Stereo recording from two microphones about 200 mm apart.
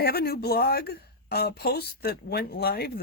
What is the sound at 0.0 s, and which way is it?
A woman's voice, 50° left (ahead or behind).